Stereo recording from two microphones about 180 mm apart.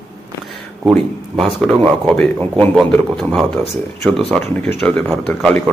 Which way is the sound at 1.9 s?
5° left (ahead or behind).